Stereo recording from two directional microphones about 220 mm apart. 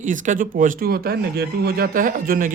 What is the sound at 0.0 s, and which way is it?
Speech, 35° right (ahead or behind).